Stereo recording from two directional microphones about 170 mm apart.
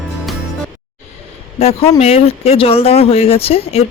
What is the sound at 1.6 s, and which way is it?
Speech, 35° left (ahead or behind).